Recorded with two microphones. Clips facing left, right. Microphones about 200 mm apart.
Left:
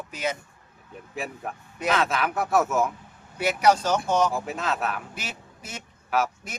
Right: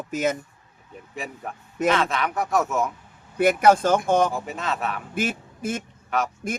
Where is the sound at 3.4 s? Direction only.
50° right (ahead or behind).